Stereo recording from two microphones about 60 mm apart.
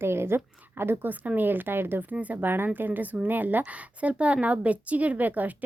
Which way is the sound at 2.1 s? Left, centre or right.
Right.